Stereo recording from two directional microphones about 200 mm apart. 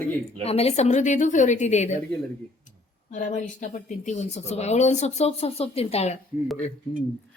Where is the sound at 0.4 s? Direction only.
30° left (ahead or behind).